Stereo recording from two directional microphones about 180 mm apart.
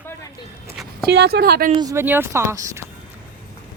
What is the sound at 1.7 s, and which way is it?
Speech, 20° right (ahead or behind).